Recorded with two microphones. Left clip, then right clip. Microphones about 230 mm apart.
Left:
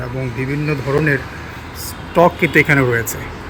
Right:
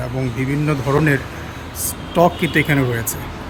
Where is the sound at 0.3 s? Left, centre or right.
Centre.